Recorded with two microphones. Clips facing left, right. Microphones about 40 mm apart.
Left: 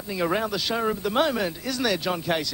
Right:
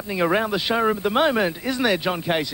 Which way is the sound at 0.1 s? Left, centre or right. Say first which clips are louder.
Right 4 dB; right.